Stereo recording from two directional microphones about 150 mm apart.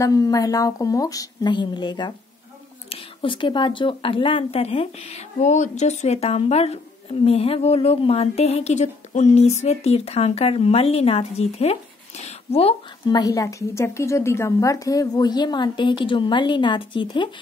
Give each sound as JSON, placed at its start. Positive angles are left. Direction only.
{"t": 0.0, "sound": "a woman's voice", "side_deg": 25}
{"t": 13.1, "sound": "a woman's voice", "side_deg": 25}